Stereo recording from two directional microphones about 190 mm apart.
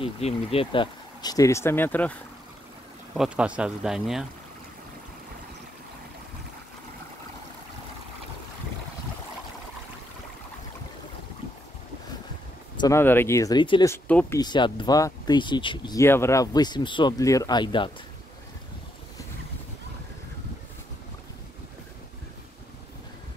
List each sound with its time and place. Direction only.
0.0 s speech: 30° left (ahead or behind); by 2.1 s 10° left (ahead or behind)
3.2 s speech: 5° right (ahead or behind)
12.8 s speech: 10° left (ahead or behind)
14.0 s speech: 10° left (ahead or behind)
14.4 s speech: 25° left (ahead or behind)